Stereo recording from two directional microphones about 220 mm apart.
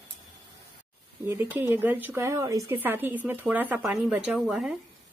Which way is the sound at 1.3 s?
10° right (ahead or behind).